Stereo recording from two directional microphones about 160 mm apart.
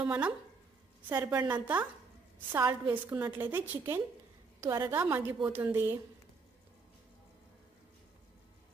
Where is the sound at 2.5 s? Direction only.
15° right (ahead or behind).